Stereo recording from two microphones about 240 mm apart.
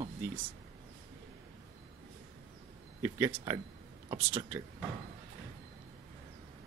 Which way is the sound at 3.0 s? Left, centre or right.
Centre.